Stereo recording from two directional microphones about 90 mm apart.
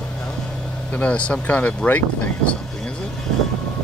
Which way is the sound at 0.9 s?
15° left (ahead or behind).